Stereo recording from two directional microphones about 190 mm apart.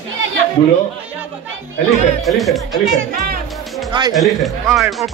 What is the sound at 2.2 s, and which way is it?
Speech, centre (ahead or behind).